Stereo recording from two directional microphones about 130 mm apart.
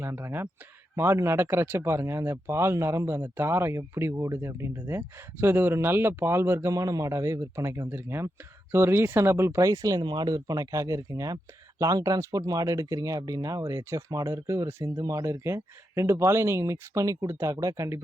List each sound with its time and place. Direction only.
0.0 s speech: 20° right (ahead or behind)